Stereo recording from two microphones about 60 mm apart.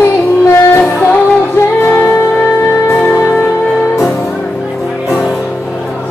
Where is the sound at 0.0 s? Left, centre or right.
Left.